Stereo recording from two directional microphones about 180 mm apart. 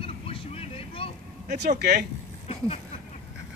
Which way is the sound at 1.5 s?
60° right (ahead or behind).